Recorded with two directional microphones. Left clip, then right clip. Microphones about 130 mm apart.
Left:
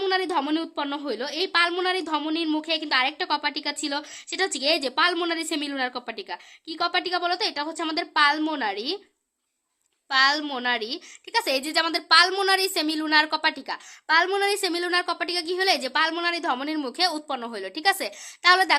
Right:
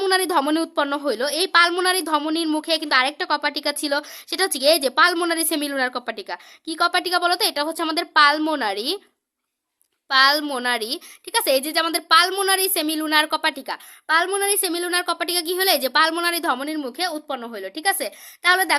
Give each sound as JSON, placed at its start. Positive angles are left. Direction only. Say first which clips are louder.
{"t": 0.0, "sound": "a woman's voice", "louder": "right 5 dB", "side_deg": -40}
{"t": 10.1, "sound": "a woman's voice", "louder": "right 4 dB", "side_deg": -30}
{"t": 16.6, "sound": "a woman's voice", "louder": "even", "side_deg": -15}